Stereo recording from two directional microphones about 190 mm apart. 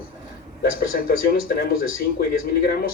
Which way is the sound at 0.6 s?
50° left (ahead or behind).